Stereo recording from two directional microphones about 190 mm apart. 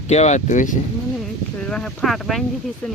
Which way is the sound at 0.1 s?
35° left (ahead or behind).